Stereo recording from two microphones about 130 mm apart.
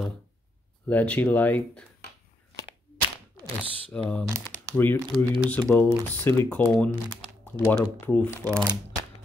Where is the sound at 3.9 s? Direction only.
15° left (ahead or behind).